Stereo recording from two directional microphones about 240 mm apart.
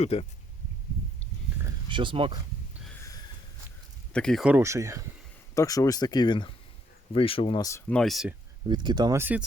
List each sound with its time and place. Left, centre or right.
0.0 s speech: left
1.6 s a sound: centre
4.1 s speech: centre
5.5 s speech: centre
8.6 s speech: centre